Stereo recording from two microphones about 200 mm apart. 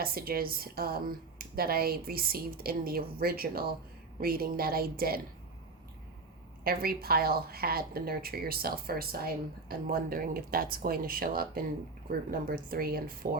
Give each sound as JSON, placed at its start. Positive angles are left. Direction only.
{"t": 0.0, "sound": "speech", "side_deg": -50}
{"t": 6.7, "sound": "speech", "side_deg": -50}